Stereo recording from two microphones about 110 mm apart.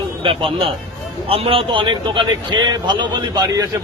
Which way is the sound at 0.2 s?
50° right (ahead or behind).